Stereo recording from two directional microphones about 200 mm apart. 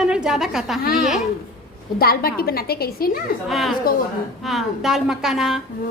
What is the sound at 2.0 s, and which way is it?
A woman's voice, 50° left (ahead or behind).